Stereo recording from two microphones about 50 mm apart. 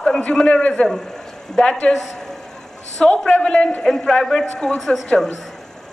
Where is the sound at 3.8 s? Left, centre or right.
Centre.